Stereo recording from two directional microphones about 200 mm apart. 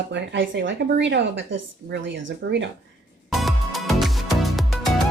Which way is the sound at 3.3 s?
Centre (ahead or behind).